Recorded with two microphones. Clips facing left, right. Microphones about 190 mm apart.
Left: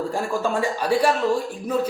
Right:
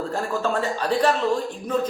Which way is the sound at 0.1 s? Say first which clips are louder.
Left 1 dB; 10° left (ahead or behind).